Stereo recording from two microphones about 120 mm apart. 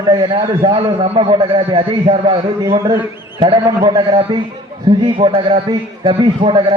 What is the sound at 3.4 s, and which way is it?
A man's voice, 45° right (ahead or behind).